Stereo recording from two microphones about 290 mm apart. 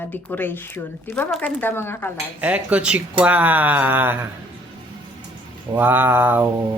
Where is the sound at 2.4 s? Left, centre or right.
Centre.